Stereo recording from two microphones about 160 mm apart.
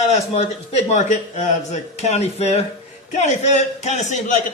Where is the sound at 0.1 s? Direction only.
45° left (ahead or behind).